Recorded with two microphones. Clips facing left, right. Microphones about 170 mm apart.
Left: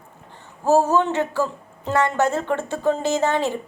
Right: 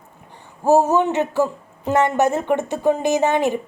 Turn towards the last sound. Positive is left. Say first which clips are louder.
# right 3 dB
turn(degrees=-15)  # may be behind; listen again after turning